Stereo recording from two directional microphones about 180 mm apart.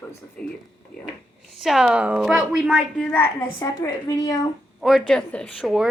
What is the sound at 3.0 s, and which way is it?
A woman's voice, 10° left (ahead or behind).